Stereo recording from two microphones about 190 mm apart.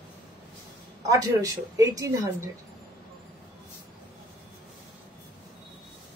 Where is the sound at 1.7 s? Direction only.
15° right (ahead or behind).